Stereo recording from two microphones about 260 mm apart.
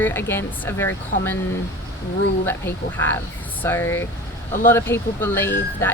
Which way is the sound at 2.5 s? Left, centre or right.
Centre.